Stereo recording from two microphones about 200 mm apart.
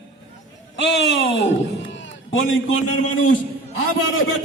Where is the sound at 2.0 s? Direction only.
75° left (ahead or behind).